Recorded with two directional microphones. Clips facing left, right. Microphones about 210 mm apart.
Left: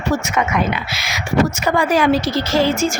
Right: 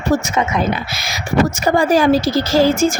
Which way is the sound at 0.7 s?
40° right (ahead or behind).